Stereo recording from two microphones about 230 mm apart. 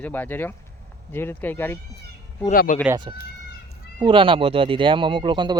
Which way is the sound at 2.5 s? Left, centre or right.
Left.